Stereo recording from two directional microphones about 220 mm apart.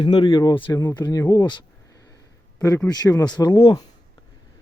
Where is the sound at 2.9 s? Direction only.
20° left (ahead or behind).